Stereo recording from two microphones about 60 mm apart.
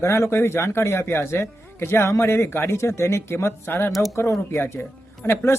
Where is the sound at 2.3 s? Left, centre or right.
Left.